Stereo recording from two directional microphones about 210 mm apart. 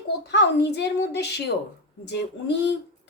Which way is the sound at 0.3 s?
55° left (ahead or behind).